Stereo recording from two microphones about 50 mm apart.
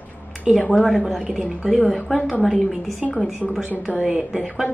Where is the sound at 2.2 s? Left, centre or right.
Centre.